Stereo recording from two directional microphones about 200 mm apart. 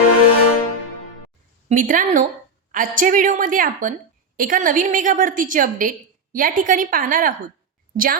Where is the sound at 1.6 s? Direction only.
40° right (ahead or behind).